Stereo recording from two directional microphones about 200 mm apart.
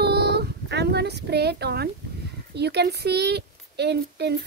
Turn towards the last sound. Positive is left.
turn(degrees=-55)  # may be behind; listen again after turning